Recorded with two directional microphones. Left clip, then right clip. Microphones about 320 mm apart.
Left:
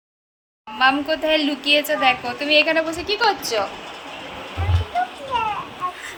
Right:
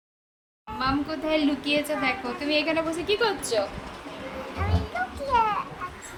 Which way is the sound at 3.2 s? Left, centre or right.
Left.